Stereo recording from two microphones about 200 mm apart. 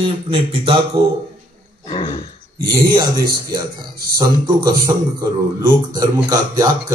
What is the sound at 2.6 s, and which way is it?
Speech, 25° right (ahead or behind).